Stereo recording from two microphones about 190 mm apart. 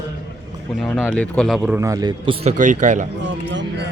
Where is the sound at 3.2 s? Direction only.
70° right (ahead or behind).